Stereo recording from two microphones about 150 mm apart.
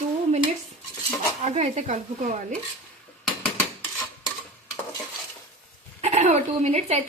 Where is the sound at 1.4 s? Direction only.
50° right (ahead or behind).